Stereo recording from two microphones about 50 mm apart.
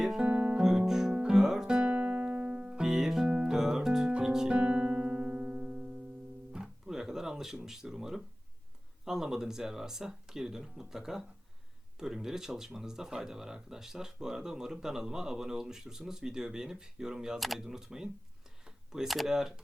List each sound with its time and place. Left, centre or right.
0.2 s music: right
0.5 s music: centre
1.6 s music: centre
3.2 s guitar: right
3.5 s music: centre
6.5 s guitar: centre
9.0 s speech: centre
18.6 s a sound: centre
19.0 s speech: centre